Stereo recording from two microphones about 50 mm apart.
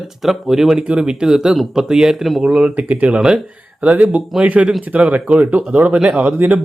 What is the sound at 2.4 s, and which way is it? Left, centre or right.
A man's voice, right.